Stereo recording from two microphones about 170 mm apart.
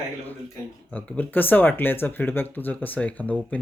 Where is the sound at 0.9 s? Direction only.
10° left (ahead or behind).